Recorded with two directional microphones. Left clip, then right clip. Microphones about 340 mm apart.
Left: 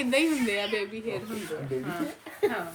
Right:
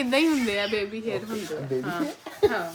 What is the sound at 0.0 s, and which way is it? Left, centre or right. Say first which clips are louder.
Speech: right 2 dB; right.